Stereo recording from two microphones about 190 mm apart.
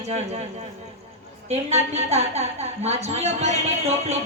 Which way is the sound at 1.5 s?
35° right (ahead or behind).